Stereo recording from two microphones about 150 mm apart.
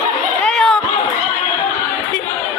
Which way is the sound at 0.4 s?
5° left (ahead or behind).